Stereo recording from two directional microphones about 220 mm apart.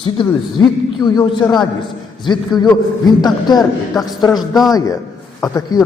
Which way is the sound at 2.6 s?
20° left (ahead or behind).